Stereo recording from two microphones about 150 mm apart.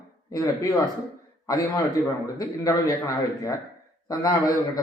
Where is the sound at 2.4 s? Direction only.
25° left (ahead or behind).